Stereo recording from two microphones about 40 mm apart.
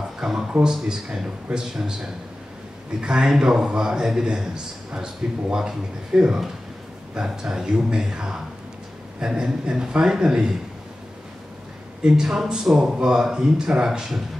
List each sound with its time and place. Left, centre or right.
0.2 s a sound: centre
0.5 s speech: right
12.0 s speech: centre